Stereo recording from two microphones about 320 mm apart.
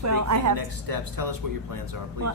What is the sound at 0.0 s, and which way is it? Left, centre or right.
A woman's voice, right.